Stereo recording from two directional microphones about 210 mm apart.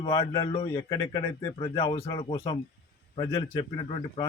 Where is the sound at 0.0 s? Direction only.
20° left (ahead or behind).